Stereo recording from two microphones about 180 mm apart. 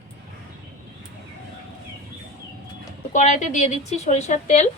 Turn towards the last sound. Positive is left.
turn(degrees=40)  # may be behind; listen again after turning